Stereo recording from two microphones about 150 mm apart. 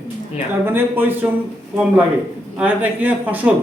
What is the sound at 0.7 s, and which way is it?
Speech, 15° right (ahead or behind).